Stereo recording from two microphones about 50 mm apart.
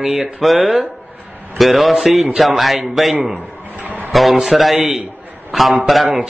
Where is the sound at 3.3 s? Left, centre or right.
Right.